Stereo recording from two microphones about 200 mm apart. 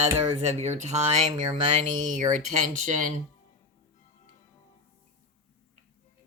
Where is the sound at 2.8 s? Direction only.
35° right (ahead or behind).